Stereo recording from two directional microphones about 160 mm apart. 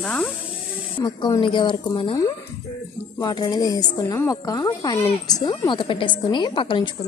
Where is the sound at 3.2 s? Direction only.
25° left (ahead or behind).